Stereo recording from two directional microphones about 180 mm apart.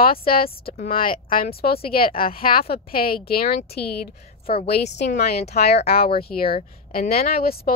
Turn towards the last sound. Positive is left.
turn(degrees=55)  # may be behind; listen again after turning